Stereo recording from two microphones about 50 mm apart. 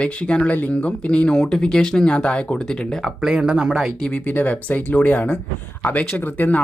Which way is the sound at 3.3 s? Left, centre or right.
Centre.